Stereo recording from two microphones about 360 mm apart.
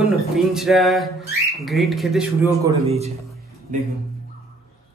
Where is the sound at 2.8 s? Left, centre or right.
Centre.